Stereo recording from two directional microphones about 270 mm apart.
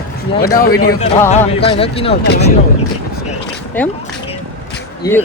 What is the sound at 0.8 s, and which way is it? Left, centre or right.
Speech, left.